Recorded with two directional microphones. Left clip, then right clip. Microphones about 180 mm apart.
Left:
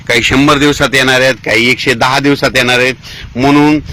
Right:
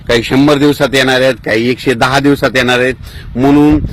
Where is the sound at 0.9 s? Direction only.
30° right (ahead or behind).